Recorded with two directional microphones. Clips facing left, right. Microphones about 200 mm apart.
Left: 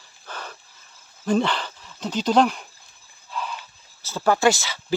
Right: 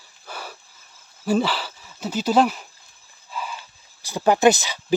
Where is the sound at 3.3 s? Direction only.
5° right (ahead or behind).